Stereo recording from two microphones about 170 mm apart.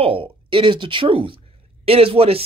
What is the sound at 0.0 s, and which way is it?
Speech, 30° right (ahead or behind).